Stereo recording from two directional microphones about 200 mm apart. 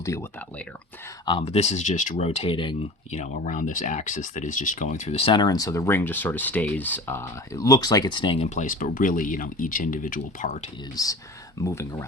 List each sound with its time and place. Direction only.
0.0 s speech: 15° left (ahead or behind); by 10.6 s 40° left (ahead or behind)
10.9 s speech: 15° left (ahead or behind)